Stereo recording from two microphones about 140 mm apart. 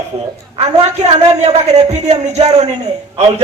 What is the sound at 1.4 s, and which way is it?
A man's voice, 55° right (ahead or behind).